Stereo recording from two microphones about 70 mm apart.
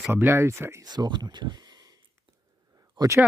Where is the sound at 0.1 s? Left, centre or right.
Right.